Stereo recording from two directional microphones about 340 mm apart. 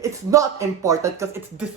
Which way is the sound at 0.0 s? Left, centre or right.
Centre.